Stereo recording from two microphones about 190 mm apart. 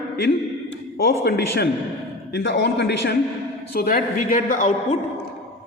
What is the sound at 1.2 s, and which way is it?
Speech, 55° left (ahead or behind).